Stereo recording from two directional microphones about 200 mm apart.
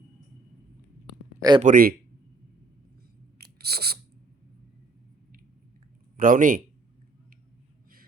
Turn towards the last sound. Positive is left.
turn(degrees=-40)  # may be behind; listen again after turning